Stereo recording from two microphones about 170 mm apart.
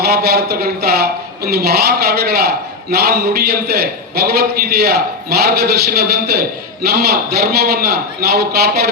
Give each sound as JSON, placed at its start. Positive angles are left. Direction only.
{"t": 0.0, "sound": "speech", "side_deg": -65}